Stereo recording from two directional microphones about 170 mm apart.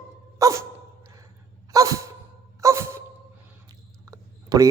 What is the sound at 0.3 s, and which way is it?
Dog, 20° right (ahead or behind).